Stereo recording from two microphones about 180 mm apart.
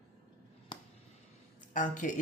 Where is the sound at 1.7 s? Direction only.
45° left (ahead or behind).